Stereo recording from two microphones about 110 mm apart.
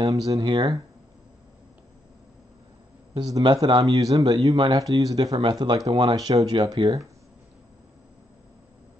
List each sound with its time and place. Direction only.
0.0 s speech: 35° right (ahead or behind)
3.2 s speech: 35° right (ahead or behind)
6.5 s speech: 45° right (ahead or behind)